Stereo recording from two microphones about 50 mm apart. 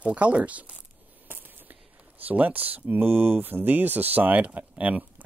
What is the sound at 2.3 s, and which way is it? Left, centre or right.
Speech, right.